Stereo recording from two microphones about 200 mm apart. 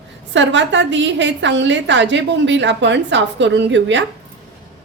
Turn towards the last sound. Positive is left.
turn(degrees=-65)  # may be behind; listen again after turning